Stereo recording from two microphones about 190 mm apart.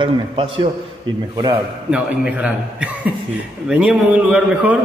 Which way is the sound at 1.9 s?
5° right (ahead or behind).